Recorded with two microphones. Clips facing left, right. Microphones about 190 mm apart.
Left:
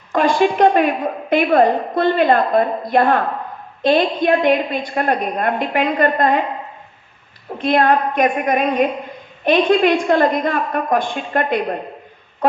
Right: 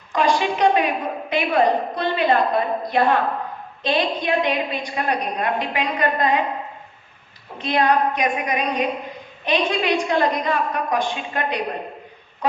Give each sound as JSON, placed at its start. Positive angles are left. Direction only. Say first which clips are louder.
{"t": 0.1, "sound": "a woman's voice", "louder": "left 5 dB", "side_deg": 50}
{"t": 7.6, "sound": "a woman's voice", "louder": "left 3 dB", "side_deg": 50}